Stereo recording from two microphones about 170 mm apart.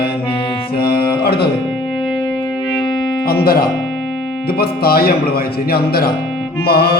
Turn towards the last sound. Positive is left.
turn(degrees=65)  # may be behind; listen again after turning